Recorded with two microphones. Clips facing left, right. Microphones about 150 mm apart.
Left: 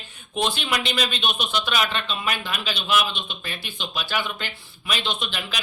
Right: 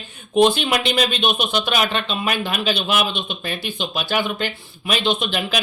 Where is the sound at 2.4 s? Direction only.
55° right (ahead or behind).